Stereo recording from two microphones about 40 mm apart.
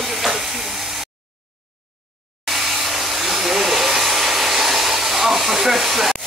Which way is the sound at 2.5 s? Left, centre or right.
Centre.